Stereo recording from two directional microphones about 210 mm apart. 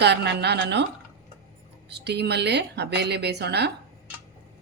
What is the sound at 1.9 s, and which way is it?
A woman's voice, 50° right (ahead or behind).